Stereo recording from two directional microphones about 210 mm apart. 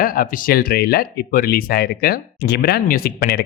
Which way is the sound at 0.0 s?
40° left (ahead or behind).